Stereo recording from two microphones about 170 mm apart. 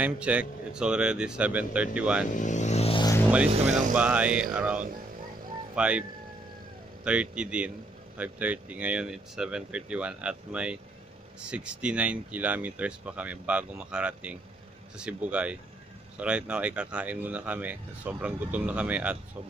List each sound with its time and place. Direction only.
0.0 s speech: 10° right (ahead or behind)
2.2 s speech: 45° left (ahead or behind)
3.9 s speech: 5° right (ahead or behind)
7.1 s speech: 5° right (ahead or behind)